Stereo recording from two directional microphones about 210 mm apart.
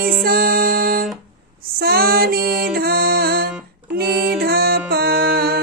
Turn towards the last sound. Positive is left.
turn(degrees=-50)  # may be behind; listen again after turning